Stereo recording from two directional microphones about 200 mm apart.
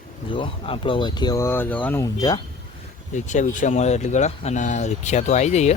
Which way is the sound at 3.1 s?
35° left (ahead or behind).